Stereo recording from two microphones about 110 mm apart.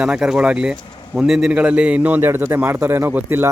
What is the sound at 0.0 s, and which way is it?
A man's voice, 10° right (ahead or behind).